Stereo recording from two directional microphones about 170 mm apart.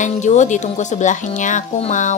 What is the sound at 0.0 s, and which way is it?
Speech, 45° left (ahead or behind).